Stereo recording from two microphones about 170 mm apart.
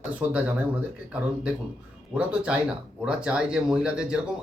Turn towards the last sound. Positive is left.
turn(degrees=-5)  # may be behind; listen again after turning